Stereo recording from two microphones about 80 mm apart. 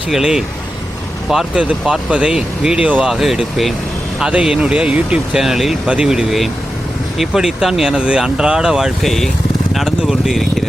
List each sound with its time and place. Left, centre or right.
0.1 s speech: centre